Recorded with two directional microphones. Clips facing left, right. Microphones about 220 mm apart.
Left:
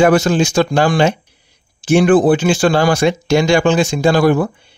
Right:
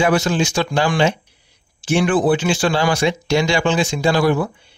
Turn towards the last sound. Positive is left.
turn(degrees=50)  # may be behind; listen again after turning